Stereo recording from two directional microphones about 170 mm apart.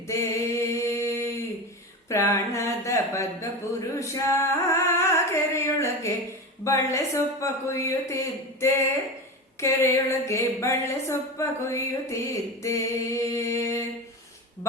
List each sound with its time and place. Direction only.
0.1 s mantra: 15° left (ahead or behind)
2.0 s speech: 15° left (ahead or behind)
6.7 s mantra: 20° left (ahead or behind)